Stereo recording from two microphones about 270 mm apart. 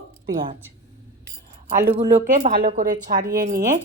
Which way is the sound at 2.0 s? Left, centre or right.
Right.